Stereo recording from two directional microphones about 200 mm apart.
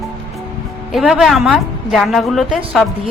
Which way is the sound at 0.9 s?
Centre (ahead or behind).